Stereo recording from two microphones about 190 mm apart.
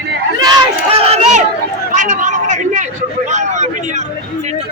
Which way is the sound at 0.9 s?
30° right (ahead or behind).